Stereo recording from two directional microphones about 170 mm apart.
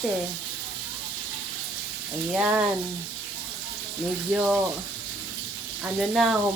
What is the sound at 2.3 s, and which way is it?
Speech, 10° right (ahead or behind).